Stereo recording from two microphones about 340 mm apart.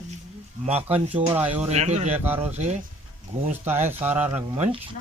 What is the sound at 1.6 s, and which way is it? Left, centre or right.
Speech, centre.